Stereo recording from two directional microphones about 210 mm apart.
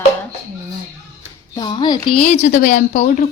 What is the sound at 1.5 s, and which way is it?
Speech, 20° left (ahead or behind).